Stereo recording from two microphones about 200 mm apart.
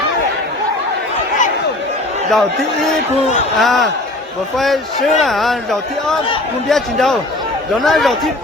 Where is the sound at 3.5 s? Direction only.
Centre (ahead or behind).